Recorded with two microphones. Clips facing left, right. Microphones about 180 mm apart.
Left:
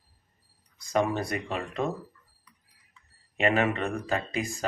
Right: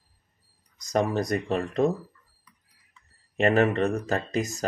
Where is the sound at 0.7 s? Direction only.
40° right (ahead or behind).